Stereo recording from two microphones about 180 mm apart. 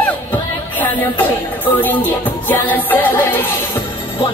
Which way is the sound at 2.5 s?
10° left (ahead or behind).